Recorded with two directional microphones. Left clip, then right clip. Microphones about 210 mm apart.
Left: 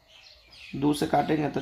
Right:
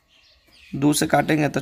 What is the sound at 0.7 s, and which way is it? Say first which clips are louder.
Speech: right 5 dB; 50° right (ahead or behind).